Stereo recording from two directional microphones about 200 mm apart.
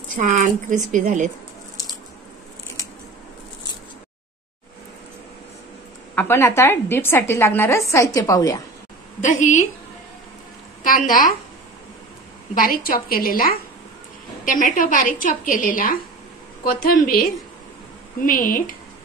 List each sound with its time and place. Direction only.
0.2 s speech: 40° right (ahead or behind)
6.1 s a woman's voice: 10° left (ahead or behind)
9.2 s a woman's voice: 40° left (ahead or behind)
10.8 s a woman's voice: 45° left (ahead or behind)
12.5 s a woman's voice: 45° left (ahead or behind)